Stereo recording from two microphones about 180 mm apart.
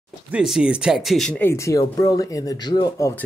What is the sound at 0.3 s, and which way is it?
Speech, 5° right (ahead or behind).